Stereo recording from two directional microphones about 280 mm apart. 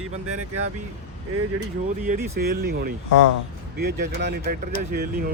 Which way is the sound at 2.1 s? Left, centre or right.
Right.